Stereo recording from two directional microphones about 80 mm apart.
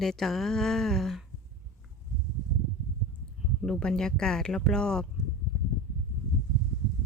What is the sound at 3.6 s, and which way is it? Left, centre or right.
Speech, centre.